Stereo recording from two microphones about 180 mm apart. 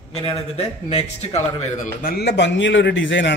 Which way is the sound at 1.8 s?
55° left (ahead or behind).